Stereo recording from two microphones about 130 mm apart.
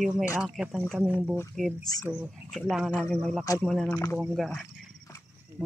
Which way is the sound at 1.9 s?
30° left (ahead or behind).